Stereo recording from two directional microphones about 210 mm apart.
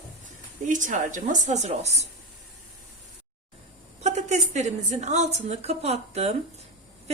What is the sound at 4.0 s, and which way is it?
A woman's voice, 30° right (ahead or behind).